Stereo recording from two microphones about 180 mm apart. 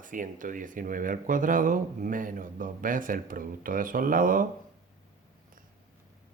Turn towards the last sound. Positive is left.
turn(degrees=-50)  # may be behind; listen again after turning